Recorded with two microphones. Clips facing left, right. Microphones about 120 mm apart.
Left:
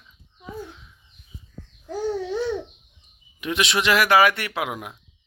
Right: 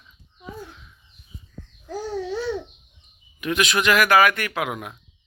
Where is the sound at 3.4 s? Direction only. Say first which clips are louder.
Right 1 dB; 25° left (ahead or behind).